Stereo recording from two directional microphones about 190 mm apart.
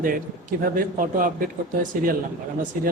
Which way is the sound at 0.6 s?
45° right (ahead or behind).